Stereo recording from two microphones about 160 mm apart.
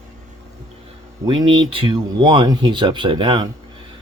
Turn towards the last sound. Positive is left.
turn(degrees=-30)  # may be behind; listen again after turning